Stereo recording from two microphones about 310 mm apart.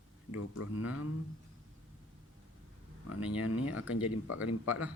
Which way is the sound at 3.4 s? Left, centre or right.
Left.